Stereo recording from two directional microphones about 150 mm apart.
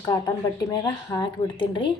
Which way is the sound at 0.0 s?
25° left (ahead or behind).